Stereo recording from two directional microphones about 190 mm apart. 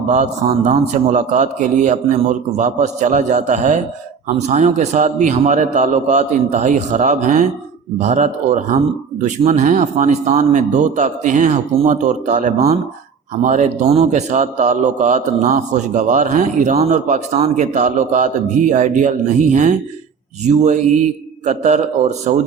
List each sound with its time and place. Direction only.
0.1 s a man's voice: 40° right (ahead or behind)